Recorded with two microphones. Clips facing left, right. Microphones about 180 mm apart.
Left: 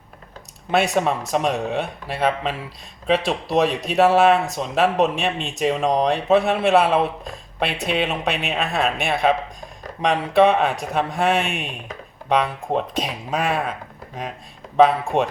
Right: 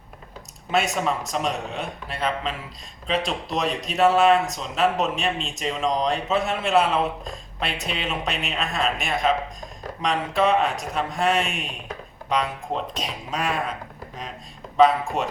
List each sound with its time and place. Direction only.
1.3 s speech: 60° left (ahead or behind)
14.8 s speech: 60° left (ahead or behind)